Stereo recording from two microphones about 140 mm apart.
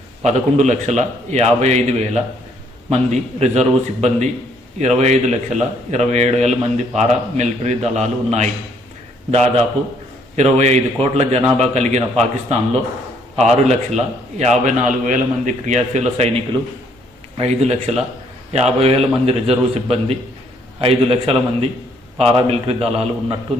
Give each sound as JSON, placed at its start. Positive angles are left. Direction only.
{"t": 0.3, "sound": "a man's voice", "side_deg": -55}
{"t": 17.3, "sound": "a man's voice", "side_deg": -50}